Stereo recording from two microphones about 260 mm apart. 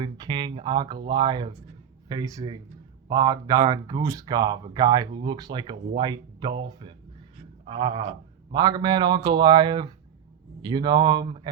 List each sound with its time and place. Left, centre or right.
0.0 s speech: centre
7.6 s a sound: centre
8.5 s speech: centre